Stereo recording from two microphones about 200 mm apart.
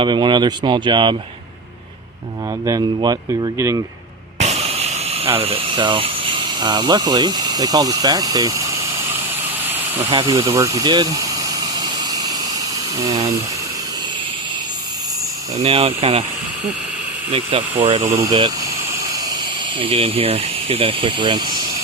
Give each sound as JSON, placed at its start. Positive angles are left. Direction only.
{"t": 0.0, "sound": "speech", "side_deg": -25}
{"t": 2.6, "sound": "speech", "side_deg": -20}
{"t": 4.4, "sound": "a sound", "side_deg": -30}
{"t": 5.4, "sound": "speech", "side_deg": -30}
{"t": 10.1, "sound": "engine", "side_deg": -20}
{"t": 13.1, "sound": "speech", "side_deg": -20}
{"t": 15.6, "sound": "speech", "side_deg": -30}
{"t": 17.3, "sound": "speech", "side_deg": -25}
{"t": 19.8, "sound": "speech", "side_deg": -30}